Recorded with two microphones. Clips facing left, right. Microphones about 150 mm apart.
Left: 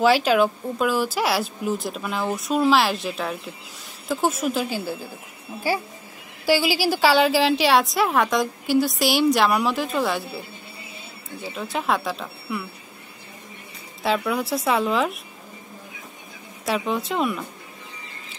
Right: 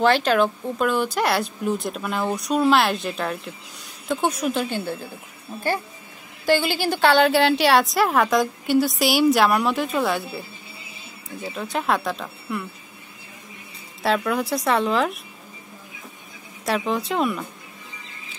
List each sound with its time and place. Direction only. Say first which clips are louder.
0.0 s a woman's voice: left 1 dB; 5° left (ahead or behind)
6.4 s a woman's voice: even; 5° left (ahead or behind)
11.4 s a woman's voice: right 1 dB; centre (ahead or behind)
14.0 s a woman's voice: right 1 dB; centre (ahead or behind)
16.6 s a woman's voice: right 1 dB; centre (ahead or behind)